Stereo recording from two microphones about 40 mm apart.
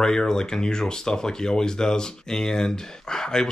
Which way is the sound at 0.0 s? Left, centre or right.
Centre.